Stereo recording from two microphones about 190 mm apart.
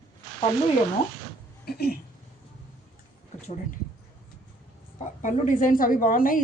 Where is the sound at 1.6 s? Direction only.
55° left (ahead or behind).